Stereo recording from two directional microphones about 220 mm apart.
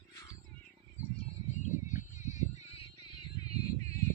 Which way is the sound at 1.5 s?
35° left (ahead or behind).